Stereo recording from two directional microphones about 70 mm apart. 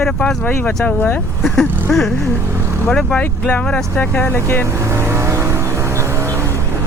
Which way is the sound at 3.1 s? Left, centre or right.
Centre.